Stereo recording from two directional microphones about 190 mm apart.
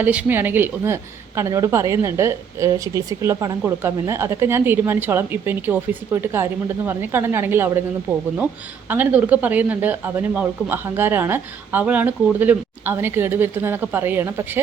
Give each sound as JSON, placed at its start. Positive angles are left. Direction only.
{"t": 0.0, "sound": "a woman's voice", "side_deg": -10}
{"t": 8.9, "sound": "a woman's voice", "side_deg": -10}